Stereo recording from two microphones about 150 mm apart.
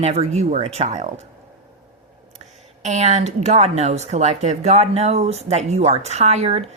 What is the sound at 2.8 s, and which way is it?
Speech, 50° right (ahead or behind).